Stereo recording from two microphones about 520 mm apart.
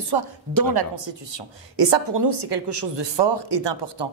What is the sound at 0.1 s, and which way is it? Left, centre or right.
A woman's voice, right.